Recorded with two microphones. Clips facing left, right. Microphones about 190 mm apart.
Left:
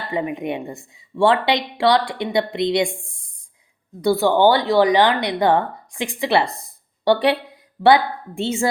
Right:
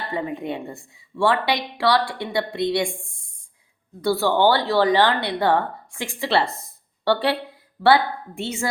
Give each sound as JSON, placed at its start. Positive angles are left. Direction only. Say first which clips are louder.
{"t": 0.1, "sound": "a woman's voice", "louder": "left 4 dB", "side_deg": 15}
{"t": 4.0, "sound": "a woman's voice", "louder": "left 3 dB", "side_deg": 15}